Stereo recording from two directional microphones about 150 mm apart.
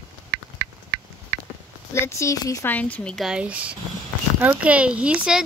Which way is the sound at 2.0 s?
20° left (ahead or behind).